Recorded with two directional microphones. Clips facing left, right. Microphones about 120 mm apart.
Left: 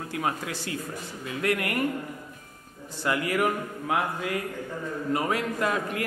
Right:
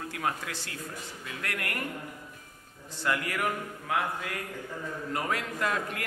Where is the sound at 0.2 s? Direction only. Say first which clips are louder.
Left 3 dB; 10° left (ahead or behind).